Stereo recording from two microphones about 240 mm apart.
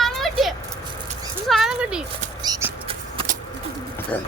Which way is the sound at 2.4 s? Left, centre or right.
Centre.